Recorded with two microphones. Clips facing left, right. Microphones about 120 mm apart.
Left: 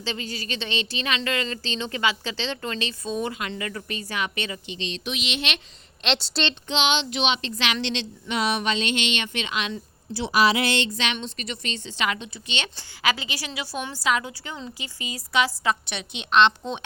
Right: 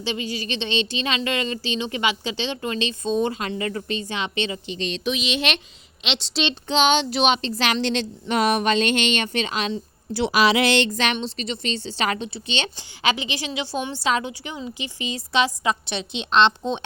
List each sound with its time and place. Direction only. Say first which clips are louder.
0.0 s a woman's voice: right 4 dB; 15° right (ahead or behind)
6.0 s a woman's voice: left 1 dB; centre (ahead or behind)
6.5 s speech: right 6 dB; 40° right (ahead or behind)
10.2 s a woman's voice: right 2 dB; 90° right
10.8 s speech: right 4 dB; 45° right (ahead or behind)
11.2 s a woman's voice: right 5 dB; 30° right (ahead or behind)